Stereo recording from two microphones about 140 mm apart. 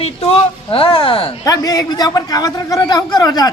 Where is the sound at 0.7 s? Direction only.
35° left (ahead or behind).